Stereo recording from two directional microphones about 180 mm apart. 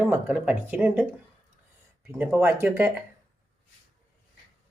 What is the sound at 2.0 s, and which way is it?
Speech, 10° right (ahead or behind).